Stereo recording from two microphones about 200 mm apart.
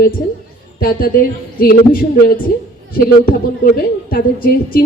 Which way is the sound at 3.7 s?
50° left (ahead or behind).